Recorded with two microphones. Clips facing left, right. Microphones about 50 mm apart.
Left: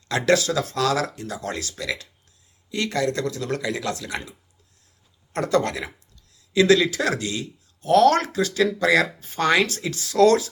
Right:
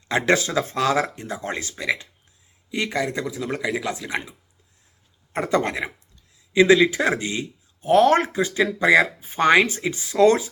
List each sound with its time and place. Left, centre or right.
0.1 s speech: right